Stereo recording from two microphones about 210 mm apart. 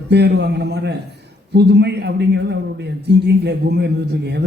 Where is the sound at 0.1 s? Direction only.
55° right (ahead or behind).